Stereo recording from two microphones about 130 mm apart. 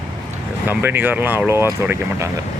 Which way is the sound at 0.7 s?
15° right (ahead or behind).